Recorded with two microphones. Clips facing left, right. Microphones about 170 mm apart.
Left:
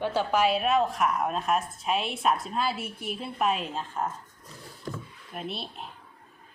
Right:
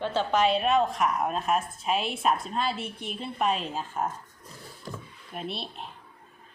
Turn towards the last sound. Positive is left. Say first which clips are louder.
# even
turn(degrees=0)  # may be behind; listen again after turning